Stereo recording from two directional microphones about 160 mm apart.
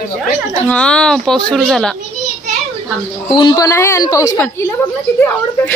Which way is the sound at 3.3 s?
25° left (ahead or behind).